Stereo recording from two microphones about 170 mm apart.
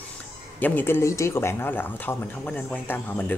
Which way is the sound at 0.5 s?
10° left (ahead or behind).